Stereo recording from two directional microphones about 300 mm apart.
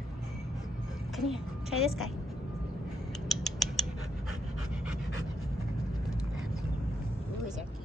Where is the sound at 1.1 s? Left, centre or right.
Centre.